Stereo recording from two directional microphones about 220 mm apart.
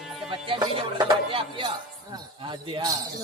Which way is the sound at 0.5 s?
20° right (ahead or behind).